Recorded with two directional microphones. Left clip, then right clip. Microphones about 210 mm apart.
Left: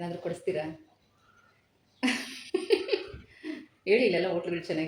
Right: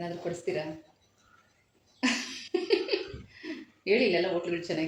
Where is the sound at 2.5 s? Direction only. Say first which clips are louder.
Left 1 dB; 10° left (ahead or behind).